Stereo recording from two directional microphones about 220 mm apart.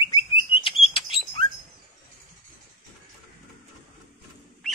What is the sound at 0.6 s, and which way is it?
Chirp, 25° left (ahead or behind).